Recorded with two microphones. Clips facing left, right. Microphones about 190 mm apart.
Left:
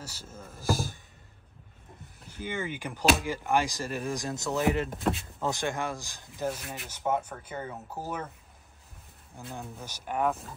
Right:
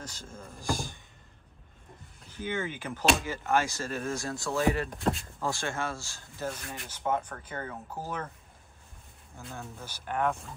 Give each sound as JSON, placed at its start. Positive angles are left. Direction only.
{"t": 0.0, "sound": "speech", "side_deg": 5}
{"t": 2.2, "sound": "speech", "side_deg": 10}
{"t": 4.8, "sound": "speech", "side_deg": 0}
{"t": 5.4, "sound": "speech", "side_deg": 20}
{"t": 6.6, "sound": "speech", "side_deg": 5}
{"t": 9.5, "sound": "speech", "side_deg": 15}